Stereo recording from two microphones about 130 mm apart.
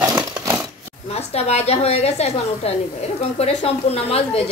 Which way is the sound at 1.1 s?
55° left (ahead or behind).